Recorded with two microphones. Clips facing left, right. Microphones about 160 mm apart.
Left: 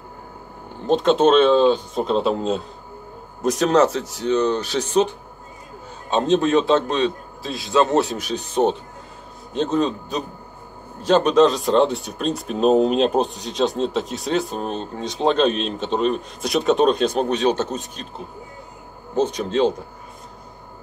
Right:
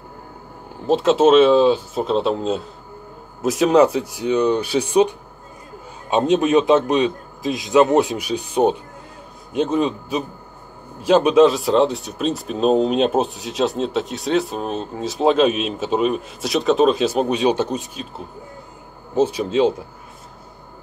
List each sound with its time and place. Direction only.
0.8 s a man's voice: 5° right (ahead or behind)
19.1 s a man's voice: 5° right (ahead or behind)